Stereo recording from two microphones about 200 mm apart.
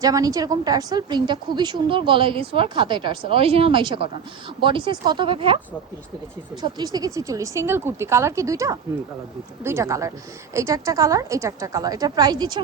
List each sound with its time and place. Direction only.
0.0 s a woman's voice: 15° right (ahead or behind)
6.6 s speech: 20° right (ahead or behind)